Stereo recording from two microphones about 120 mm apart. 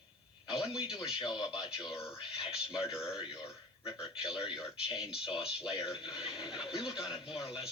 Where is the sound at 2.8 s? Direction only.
20° left (ahead or behind).